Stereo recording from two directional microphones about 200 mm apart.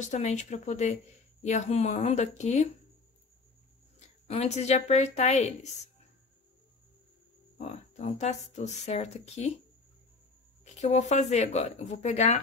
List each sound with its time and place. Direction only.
0.0 s speech: 35° left (ahead or behind)
4.3 s speech: 30° left (ahead or behind)
7.5 s speech: 35° left (ahead or behind)
10.6 s speech: 35° left (ahead or behind)